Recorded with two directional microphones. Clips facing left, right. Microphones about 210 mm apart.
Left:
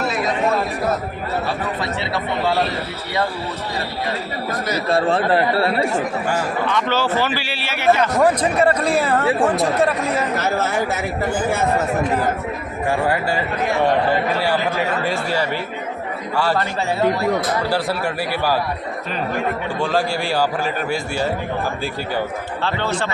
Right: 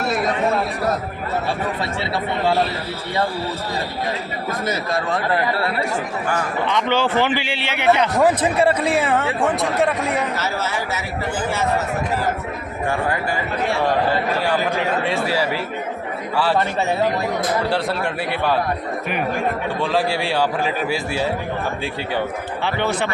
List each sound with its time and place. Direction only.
4.9 s speech: 30° left (ahead or behind)
6.7 s a man's voice: 20° right (ahead or behind)
8.2 s speech: 5° right (ahead or behind)
10.3 s speech: 50° left (ahead or behind)
15.0 s speech: centre (ahead or behind)
17.7 s speech: 5° left (ahead or behind)
19.8 s speech: centre (ahead or behind)
22.6 s a man's voice: 20° right (ahead or behind)